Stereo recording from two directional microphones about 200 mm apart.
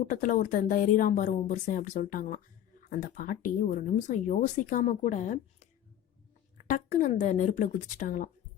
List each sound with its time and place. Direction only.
0.0 s speech: 35° left (ahead or behind)
6.7 s speech: 40° left (ahead or behind)